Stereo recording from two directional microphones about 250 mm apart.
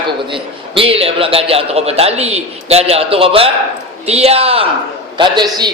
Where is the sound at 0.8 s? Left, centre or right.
Right.